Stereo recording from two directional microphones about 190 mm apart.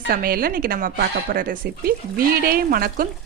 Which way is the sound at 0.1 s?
50° right (ahead or behind).